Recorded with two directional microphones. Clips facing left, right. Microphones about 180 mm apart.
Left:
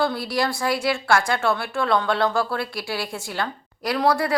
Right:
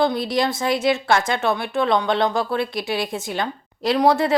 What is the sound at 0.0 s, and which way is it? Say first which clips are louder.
Speech: right 3 dB; 20° right (ahead or behind).